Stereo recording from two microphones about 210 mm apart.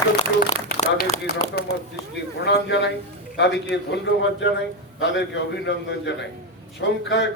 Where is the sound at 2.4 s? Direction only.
55° left (ahead or behind).